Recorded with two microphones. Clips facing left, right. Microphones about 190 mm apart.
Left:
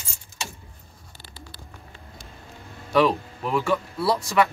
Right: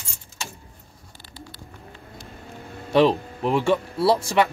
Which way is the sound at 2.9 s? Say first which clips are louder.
Right 2 dB; 30° right (ahead or behind).